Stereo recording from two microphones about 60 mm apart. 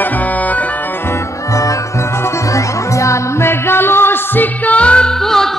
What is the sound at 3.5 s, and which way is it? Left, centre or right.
Music, left.